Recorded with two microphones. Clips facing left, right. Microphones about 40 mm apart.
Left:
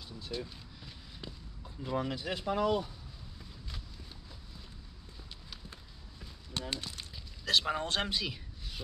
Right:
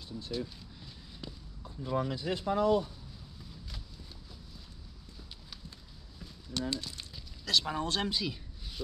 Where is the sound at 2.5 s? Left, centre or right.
Left.